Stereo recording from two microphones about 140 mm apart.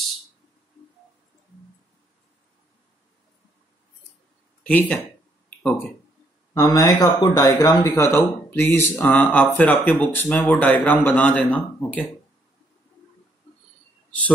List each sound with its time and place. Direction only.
4.6 s speech: 10° left (ahead or behind)
6.5 s speech: 25° left (ahead or behind)